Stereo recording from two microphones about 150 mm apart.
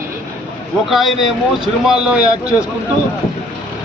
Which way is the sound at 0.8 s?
Centre (ahead or behind).